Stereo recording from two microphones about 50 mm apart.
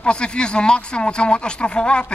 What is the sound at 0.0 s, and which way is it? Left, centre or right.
Speech, centre.